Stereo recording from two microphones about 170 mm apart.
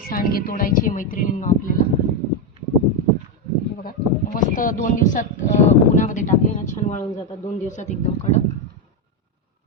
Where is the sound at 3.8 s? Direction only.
60° left (ahead or behind).